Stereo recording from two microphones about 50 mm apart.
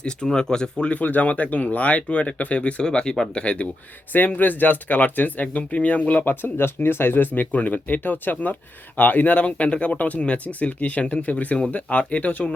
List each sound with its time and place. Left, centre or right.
0.3 s speech: centre
0.9 s speech: left
4.1 s speech: left